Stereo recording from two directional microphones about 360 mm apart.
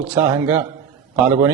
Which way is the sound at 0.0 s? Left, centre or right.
Centre.